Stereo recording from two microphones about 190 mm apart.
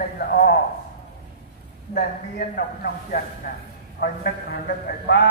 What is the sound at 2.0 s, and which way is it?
A man's voice, 55° left (ahead or behind).